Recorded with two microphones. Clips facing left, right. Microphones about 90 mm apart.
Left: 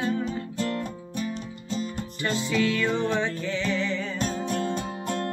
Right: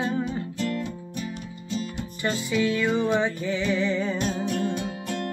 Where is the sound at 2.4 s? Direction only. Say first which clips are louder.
Right 1 dB; 15° right (ahead or behind).